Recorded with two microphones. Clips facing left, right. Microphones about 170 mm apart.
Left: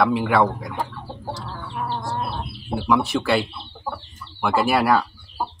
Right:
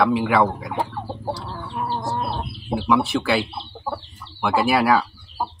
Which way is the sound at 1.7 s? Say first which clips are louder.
Right 2 dB; 20° right (ahead or behind).